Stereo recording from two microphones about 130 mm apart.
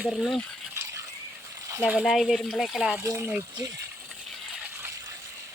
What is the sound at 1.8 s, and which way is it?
Speech, 5° right (ahead or behind).